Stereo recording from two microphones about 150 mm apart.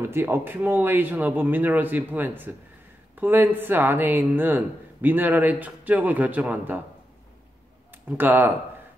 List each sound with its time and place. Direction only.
0.0 s speech: 15° right (ahead or behind)
7.9 s speech: 15° right (ahead or behind)